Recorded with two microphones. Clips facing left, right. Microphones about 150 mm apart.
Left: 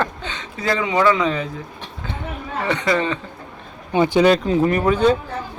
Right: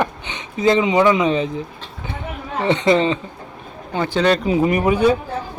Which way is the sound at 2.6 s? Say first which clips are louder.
Right 5 dB; 25° right (ahead or behind).